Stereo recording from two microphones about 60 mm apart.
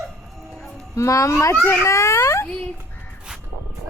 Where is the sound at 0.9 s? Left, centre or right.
Left.